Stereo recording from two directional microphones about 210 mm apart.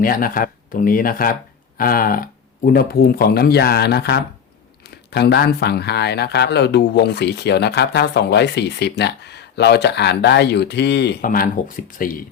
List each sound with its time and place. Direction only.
0.0 s a man's voice: 45° left (ahead or behind)